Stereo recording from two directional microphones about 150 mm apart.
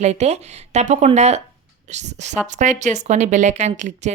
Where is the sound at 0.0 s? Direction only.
45° right (ahead or behind).